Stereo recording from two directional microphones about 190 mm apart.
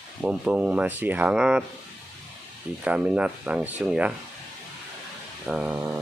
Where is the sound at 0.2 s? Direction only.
5° right (ahead or behind).